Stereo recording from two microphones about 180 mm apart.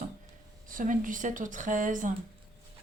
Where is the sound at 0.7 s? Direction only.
50° right (ahead or behind).